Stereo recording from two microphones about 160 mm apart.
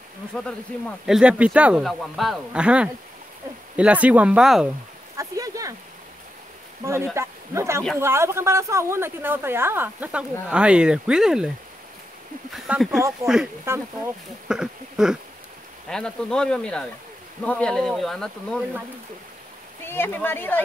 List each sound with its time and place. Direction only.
1.0 s speech: 5° right (ahead or behind)
5.1 s a sound: 20° right (ahead or behind)
6.8 s speech: 15° right (ahead or behind)
12.5 s speech: 5° right (ahead or behind)
13.7 s speech: 15° right (ahead or behind)
14.5 s a sound: 5° right (ahead or behind)
15.9 s speech: 5° left (ahead or behind)
19.8 s speech: 15° left (ahead or behind)